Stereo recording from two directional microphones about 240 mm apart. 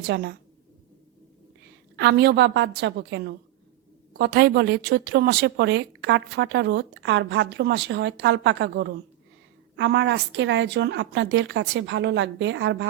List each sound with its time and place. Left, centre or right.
0.0 s speech: right
2.0 s speech: right